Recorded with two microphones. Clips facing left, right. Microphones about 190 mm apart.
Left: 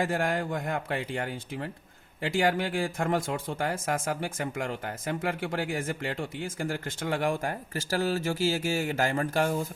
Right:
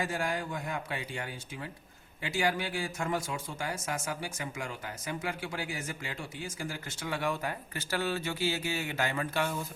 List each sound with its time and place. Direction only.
0.0 s a man's voice: 55° left (ahead or behind)